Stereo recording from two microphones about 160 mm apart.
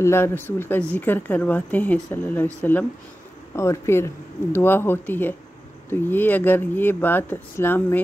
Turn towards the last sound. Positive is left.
turn(degrees=15)  # may be behind; listen again after turning